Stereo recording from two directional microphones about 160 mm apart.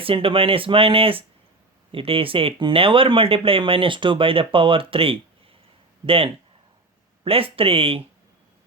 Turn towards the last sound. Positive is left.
turn(degrees=-35)  # may be behind; listen again after turning